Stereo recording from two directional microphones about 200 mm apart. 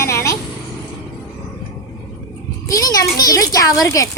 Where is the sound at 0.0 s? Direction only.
15° left (ahead or behind).